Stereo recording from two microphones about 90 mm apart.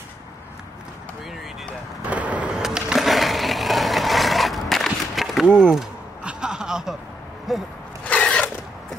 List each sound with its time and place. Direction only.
2.0 s vehicle: 15° right (ahead or behind)
2.6 s a sound: 5° right (ahead or behind)
7.5 s speech: centre (ahead or behind)
8.0 s zipper: 15° left (ahead or behind)